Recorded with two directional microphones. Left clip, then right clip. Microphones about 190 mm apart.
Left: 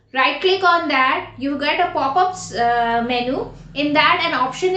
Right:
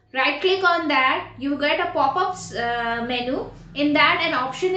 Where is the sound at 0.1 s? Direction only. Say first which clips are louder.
Left 4 dB; 5° left (ahead or behind).